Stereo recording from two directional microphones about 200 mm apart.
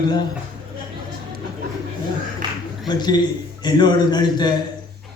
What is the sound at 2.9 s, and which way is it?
A man's voice, 20° left (ahead or behind).